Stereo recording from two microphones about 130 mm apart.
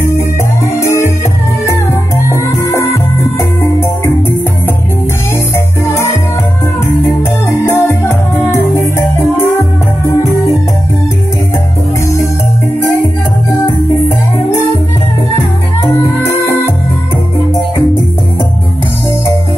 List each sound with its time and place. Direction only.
0.7 s music: 20° left (ahead or behind)
2.2 s music: 25° left (ahead or behind)
7.6 s music: 20° left (ahead or behind)